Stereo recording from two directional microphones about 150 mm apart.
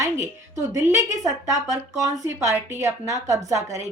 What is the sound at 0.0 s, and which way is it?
A woman's voice, 20° right (ahead or behind).